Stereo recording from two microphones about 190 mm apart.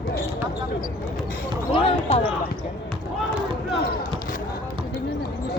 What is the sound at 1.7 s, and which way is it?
Basketball bounce, 30° left (ahead or behind).